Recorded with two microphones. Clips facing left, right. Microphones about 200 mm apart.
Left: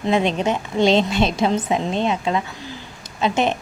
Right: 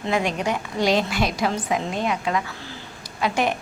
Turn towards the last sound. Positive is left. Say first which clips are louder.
# left 3 dB
turn(degrees=25)  # may be behind; listen again after turning